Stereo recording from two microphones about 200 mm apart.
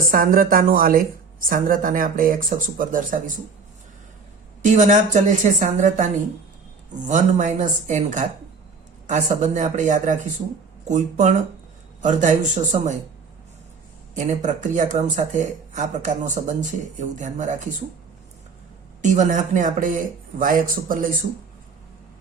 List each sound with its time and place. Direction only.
0.1 s speech: 45° right (ahead or behind)
4.6 s speech: 40° right (ahead or behind)
7.1 s speech: 35° right (ahead or behind)
14.2 s speech: 35° right (ahead or behind)
19.0 s speech: 40° right (ahead or behind)